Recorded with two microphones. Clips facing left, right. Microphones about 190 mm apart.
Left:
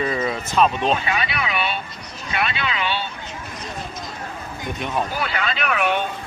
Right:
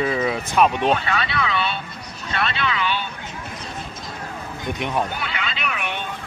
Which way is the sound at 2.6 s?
20° left (ahead or behind).